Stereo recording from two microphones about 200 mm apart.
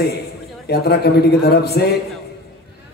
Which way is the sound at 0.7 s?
50° left (ahead or behind).